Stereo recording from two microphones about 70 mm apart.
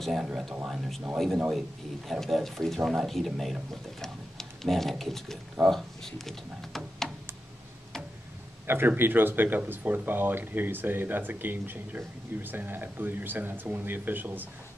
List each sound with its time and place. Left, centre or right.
0.0 s speech: centre
2.8 s speech: centre
8.6 s speech: right